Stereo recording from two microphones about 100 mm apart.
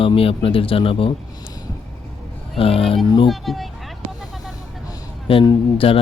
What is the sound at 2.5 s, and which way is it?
Speech, 75° left (ahead or behind).